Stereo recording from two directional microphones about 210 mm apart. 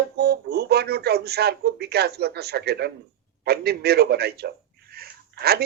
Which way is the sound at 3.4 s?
50° right (ahead or behind).